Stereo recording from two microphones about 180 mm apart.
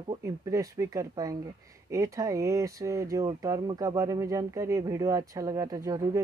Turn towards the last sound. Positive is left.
turn(degrees=-20)  # may be behind; listen again after turning